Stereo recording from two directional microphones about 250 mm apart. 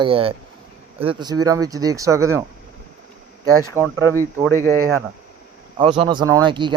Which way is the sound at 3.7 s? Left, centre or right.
Centre.